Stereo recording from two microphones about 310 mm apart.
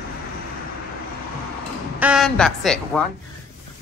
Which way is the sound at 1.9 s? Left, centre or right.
Centre.